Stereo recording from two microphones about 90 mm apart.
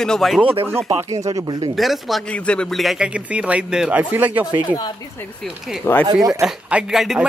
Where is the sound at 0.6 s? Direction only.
25° right (ahead or behind).